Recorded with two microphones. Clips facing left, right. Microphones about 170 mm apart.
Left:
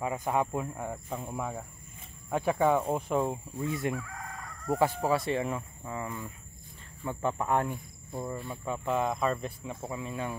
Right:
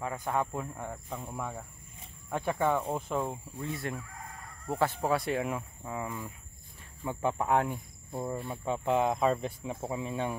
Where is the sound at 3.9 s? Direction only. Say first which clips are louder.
Left 4 dB; 90° left.